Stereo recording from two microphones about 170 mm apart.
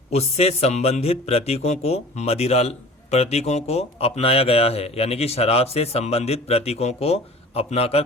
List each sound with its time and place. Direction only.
0.1 s a man's voice: 40° left (ahead or behind)